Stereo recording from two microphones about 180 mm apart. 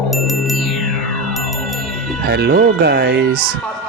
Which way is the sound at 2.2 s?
60° right (ahead or behind).